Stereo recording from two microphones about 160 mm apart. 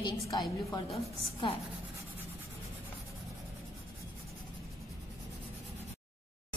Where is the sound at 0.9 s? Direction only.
35° left (ahead or behind).